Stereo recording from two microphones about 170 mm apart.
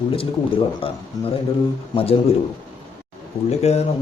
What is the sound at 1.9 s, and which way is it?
Speech, 35° left (ahead or behind).